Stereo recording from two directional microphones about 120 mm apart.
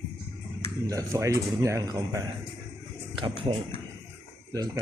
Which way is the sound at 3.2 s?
45° right (ahead or behind).